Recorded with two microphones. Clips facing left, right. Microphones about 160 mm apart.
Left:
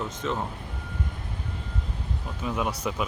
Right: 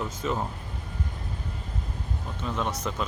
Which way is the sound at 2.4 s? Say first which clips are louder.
Left 2 dB; 10° left (ahead or behind).